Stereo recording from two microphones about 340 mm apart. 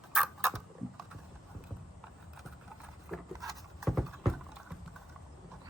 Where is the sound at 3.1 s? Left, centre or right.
Centre.